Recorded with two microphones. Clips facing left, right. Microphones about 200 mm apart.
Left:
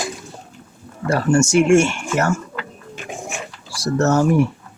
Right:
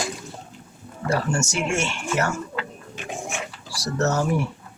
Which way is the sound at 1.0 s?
55° left (ahead or behind).